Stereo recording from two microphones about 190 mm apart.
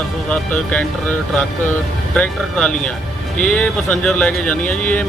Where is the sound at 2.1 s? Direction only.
5° left (ahead or behind).